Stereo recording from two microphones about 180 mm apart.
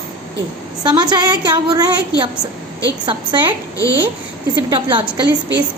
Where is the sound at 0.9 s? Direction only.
25° right (ahead or behind).